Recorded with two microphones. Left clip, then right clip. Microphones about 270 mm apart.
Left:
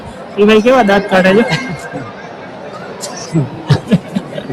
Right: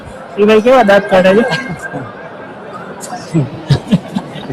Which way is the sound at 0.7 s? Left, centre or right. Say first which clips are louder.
Right 2 dB; centre.